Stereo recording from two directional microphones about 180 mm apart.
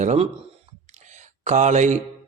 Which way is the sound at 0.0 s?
40° right (ahead or behind).